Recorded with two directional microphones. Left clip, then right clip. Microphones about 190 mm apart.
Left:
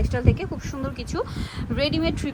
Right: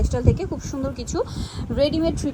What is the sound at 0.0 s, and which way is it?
A woman's voice, 20° right (ahead or behind).